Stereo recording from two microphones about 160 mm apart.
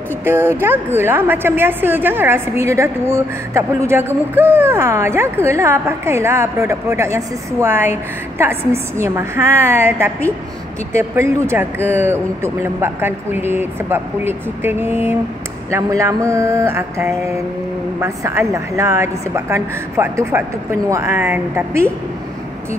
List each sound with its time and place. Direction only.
0.2 s a woman's voice: 15° right (ahead or behind)
15.7 s mantra: 20° right (ahead or behind)
18.0 s a woman's voice: 20° right (ahead or behind)